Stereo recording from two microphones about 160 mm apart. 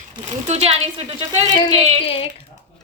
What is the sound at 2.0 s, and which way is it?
Speech, 35° left (ahead or behind).